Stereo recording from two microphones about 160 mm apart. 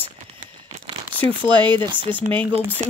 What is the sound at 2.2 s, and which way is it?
Speech, 10° left (ahead or behind).